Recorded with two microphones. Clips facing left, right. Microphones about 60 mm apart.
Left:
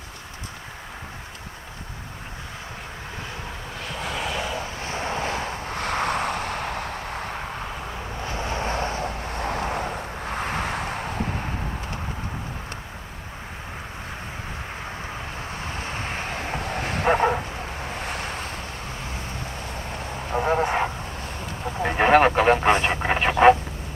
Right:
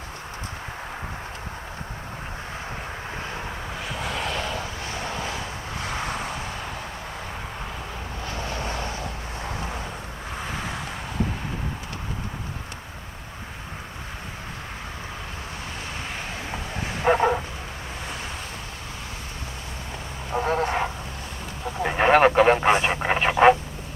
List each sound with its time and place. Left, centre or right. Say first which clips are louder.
3.8 s vehicle: left 1 dB; centre
4.8 s vehicle: left 3 dB; left
8.2 s vehicle: left 3 dB; left
15.9 s dog: left 3 dB; left
18.0 s vehicle: left 3 dB; left
20.3 s vehicle: left 2 dB; centre
21.8 s radio: even; centre